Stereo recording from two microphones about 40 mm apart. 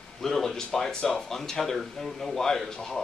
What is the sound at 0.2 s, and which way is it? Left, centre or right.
Speech, centre.